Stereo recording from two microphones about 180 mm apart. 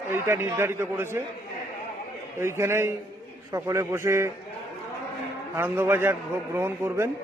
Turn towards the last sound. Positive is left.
turn(degrees=-15)  # may be behind; listen again after turning